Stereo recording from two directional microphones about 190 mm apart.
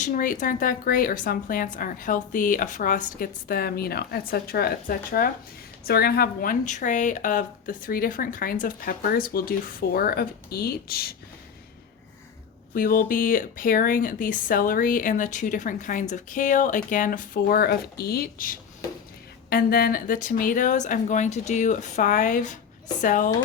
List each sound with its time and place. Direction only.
0.0 s speech: 45° left (ahead or behind)
12.7 s speech: 50° left (ahead or behind)